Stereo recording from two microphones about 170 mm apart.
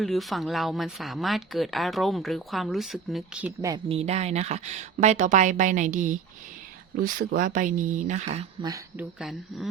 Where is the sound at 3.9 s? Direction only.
35° right (ahead or behind).